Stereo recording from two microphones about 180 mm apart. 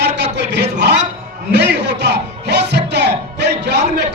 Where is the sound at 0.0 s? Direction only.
70° right (ahead or behind).